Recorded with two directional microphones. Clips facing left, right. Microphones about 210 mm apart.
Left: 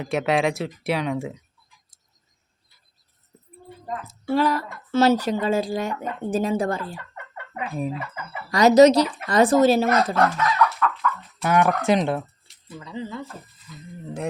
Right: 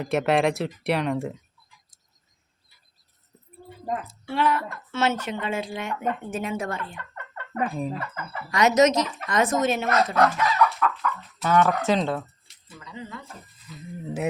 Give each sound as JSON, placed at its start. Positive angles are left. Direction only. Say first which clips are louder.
{"t": 0.0, "sound": "speech", "louder": "even", "side_deg": 0}
{"t": 4.0, "sound": "a woman's voice", "louder": "left 5 dB", "side_deg": 40}
{"t": 6.9, "sound": "fowl", "louder": "left 1 dB", "side_deg": 10}
{"t": 7.9, "sound": "speech", "louder": "even", "side_deg": 10}
{"t": 8.4, "sound": "a woman's voice", "louder": "left 6 dB", "side_deg": 35}
{"t": 10.3, "sound": "chicken", "louder": "left 1 dB", "side_deg": -5}
{"t": 11.4, "sound": "speech", "louder": "left 1 dB", "side_deg": 15}
{"t": 12.8, "sound": "speech", "louder": "left 6 dB", "side_deg": 30}
{"t": 14.0, "sound": "speech", "louder": "right 2 dB", "side_deg": -5}